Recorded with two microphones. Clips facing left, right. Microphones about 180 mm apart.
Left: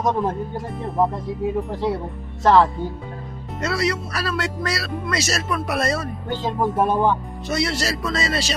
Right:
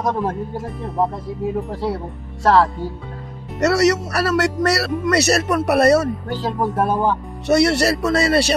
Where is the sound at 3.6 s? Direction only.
70° right (ahead or behind).